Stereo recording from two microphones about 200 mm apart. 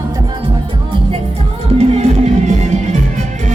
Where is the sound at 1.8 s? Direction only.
35° right (ahead or behind).